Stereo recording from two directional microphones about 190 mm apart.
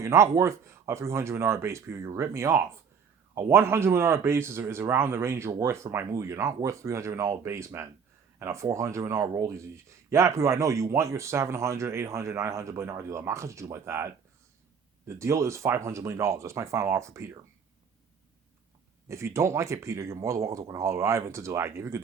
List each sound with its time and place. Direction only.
0.0 s speech: 15° right (ahead or behind)
19.0 s speech: 15° right (ahead or behind)